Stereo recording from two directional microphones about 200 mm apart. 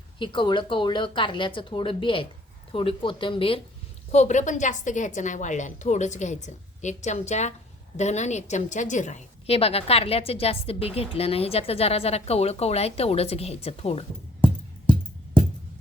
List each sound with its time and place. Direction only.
0.2 s a woman's voice: 25° left (ahead or behind)